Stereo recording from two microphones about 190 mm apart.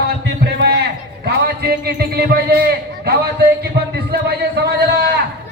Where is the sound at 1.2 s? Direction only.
55° right (ahead or behind).